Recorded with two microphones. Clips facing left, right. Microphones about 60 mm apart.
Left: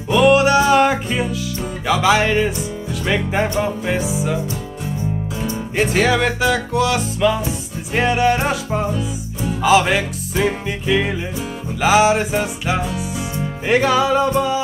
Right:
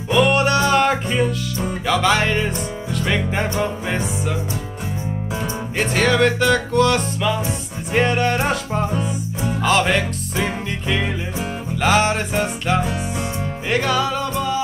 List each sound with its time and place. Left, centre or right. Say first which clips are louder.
0.1 s music: left 4 dB; centre
5.8 s music: left 1 dB; centre
13.7 s music: left 5 dB; centre